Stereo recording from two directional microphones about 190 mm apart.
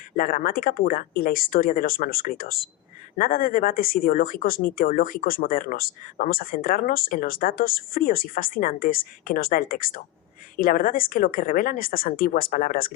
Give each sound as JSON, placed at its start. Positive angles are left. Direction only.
{"t": 0.2, "sound": "speech", "side_deg": 50}